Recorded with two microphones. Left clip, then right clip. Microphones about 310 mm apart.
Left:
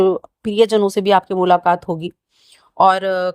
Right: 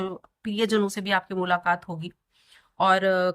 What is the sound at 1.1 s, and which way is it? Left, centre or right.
Speech, left.